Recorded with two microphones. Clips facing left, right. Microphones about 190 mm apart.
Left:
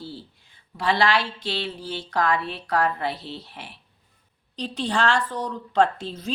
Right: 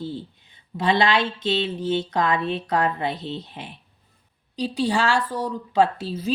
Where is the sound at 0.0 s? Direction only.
20° right (ahead or behind).